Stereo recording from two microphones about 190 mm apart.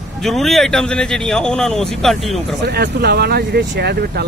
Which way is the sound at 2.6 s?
60° right (ahead or behind).